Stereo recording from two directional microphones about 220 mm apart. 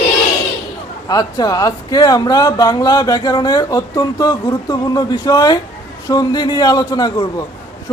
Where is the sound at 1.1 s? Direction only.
15° left (ahead or behind).